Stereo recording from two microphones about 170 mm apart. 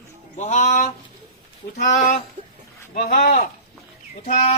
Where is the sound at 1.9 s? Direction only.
45° left (ahead or behind).